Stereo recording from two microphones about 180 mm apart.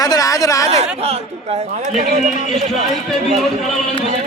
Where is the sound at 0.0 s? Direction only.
20° left (ahead or behind).